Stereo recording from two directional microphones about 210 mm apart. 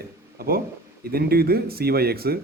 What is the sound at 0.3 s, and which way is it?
Speech, 45° right (ahead or behind).